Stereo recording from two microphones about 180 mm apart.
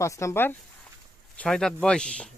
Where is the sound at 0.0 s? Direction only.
15° left (ahead or behind).